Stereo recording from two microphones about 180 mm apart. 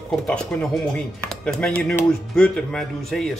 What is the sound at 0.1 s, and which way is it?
Speech, 5° left (ahead or behind).